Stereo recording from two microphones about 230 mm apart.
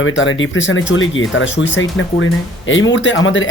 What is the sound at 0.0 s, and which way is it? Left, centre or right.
Speech, left.